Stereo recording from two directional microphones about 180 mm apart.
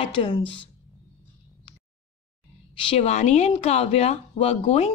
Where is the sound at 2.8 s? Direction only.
35° left (ahead or behind).